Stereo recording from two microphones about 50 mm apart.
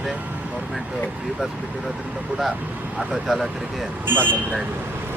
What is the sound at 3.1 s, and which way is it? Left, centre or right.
Speech, centre.